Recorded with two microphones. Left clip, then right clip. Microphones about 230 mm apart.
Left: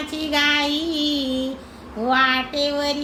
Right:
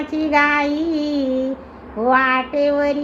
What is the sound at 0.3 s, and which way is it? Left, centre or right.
Speech, left.